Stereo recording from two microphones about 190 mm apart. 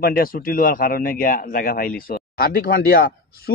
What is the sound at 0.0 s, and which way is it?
Speech, 50° left (ahead or behind).